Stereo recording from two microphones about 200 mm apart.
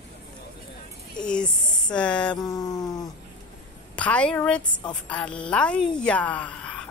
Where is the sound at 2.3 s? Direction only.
20° left (ahead or behind).